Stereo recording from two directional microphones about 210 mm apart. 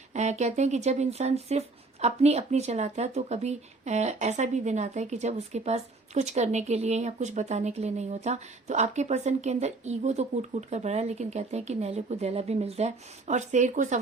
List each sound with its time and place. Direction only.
0.1 s speech: 35° right (ahead or behind)